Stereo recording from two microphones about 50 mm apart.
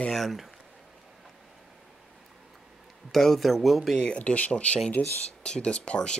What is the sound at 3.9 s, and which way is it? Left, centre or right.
Speech, centre.